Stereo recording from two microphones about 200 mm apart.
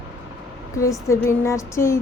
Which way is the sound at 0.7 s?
15° left (ahead or behind).